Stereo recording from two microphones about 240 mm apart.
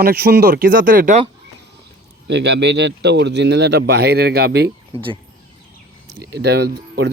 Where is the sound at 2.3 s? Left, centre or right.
Right.